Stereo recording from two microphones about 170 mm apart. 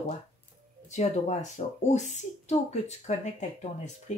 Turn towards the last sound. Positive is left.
turn(degrees=45)  # may be behind; listen again after turning